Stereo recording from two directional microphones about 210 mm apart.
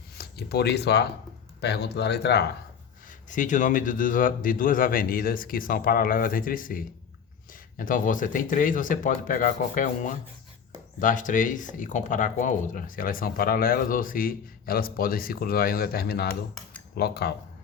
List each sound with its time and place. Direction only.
0.2 s speech: 50° left (ahead or behind)
3.2 s speech: 35° left (ahead or behind)